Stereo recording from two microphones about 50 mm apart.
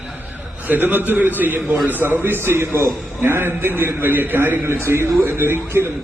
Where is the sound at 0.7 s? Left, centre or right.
Right.